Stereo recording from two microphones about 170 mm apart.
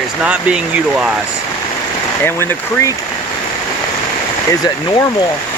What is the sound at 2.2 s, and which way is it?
Speech, 15° left (ahead or behind).